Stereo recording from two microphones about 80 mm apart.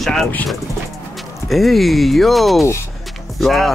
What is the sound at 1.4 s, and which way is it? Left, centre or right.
Speech, centre.